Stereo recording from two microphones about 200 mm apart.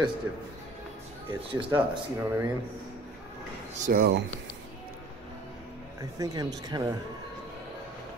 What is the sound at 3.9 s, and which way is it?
Speech, 55° right (ahead or behind).